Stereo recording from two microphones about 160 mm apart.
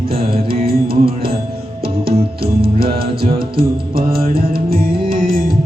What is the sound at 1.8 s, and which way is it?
Music, 75° right (ahead or behind).